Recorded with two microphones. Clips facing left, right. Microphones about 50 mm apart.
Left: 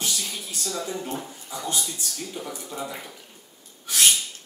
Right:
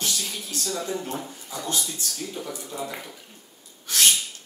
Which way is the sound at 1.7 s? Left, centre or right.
Centre.